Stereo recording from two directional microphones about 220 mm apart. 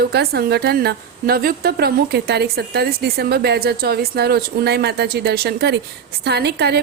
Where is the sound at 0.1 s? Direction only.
45° right (ahead or behind).